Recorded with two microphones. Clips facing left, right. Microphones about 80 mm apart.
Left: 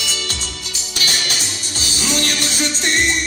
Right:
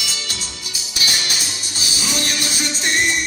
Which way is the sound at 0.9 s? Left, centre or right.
Left.